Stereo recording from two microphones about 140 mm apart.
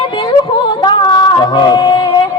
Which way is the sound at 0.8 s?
30° left (ahead or behind).